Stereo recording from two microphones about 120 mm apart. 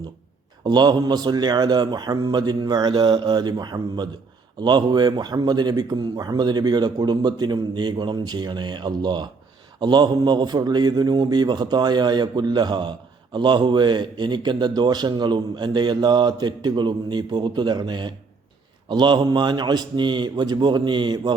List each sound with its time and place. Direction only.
0.6 s a man's voice: 35° right (ahead or behind)